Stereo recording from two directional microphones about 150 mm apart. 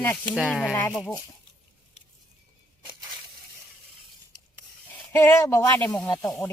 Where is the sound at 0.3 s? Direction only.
Centre (ahead or behind).